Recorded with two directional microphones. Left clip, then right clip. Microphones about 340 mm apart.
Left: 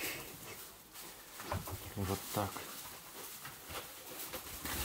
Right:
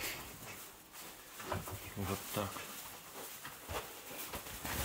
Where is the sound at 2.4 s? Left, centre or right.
Centre.